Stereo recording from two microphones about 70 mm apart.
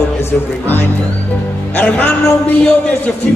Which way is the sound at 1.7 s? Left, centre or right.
Left.